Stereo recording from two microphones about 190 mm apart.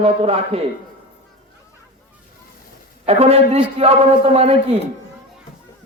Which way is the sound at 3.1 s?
35° right (ahead or behind).